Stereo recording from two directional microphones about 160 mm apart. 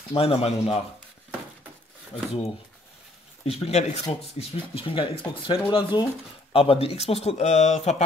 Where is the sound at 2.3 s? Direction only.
35° left (ahead or behind).